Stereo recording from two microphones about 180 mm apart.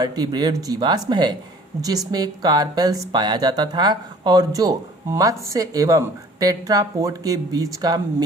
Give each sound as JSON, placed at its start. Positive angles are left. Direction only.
{"t": 0.0, "sound": "speech", "side_deg": -25}